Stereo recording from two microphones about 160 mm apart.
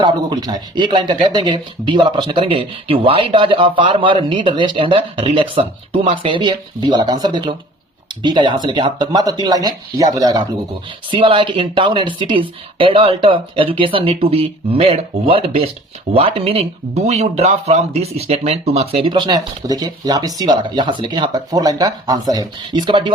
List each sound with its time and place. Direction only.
0.0 s speech: 25° right (ahead or behind)